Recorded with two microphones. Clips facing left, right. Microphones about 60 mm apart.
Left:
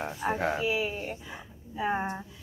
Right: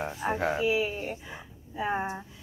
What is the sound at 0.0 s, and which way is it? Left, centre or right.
Speech, centre.